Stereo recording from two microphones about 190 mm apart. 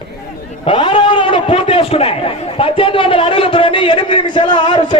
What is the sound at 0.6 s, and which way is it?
A man's voice, 25° left (ahead or behind).